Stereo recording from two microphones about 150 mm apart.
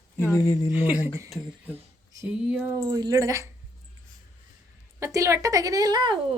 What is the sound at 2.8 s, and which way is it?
Speech, 25° right (ahead or behind).